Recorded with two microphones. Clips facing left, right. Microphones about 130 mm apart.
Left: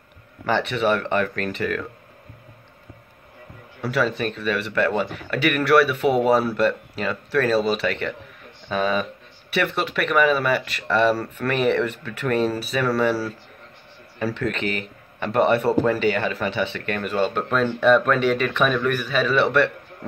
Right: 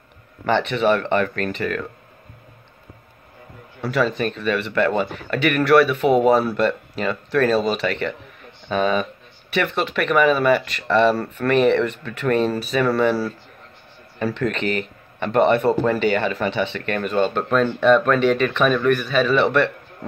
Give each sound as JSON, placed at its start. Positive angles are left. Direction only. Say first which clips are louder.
{"t": 0.5, "sound": "speech", "louder": "right 3 dB", "side_deg": 5}
{"t": 3.9, "sound": "speech", "louder": "right 2 dB", "side_deg": 5}